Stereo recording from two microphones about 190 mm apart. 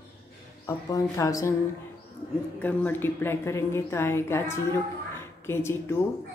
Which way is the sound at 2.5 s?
10° left (ahead or behind).